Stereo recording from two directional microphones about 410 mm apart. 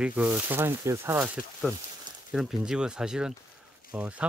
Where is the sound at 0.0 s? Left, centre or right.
Centre.